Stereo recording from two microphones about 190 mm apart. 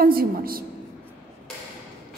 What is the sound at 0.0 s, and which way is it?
Speech, 50° right (ahead or behind).